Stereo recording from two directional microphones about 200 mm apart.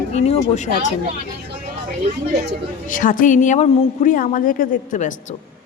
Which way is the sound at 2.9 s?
40° left (ahead or behind).